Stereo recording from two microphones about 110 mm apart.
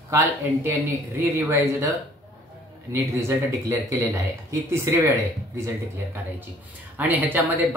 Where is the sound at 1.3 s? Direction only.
25° right (ahead or behind).